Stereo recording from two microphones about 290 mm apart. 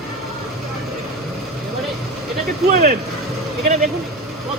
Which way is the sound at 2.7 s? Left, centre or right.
Right.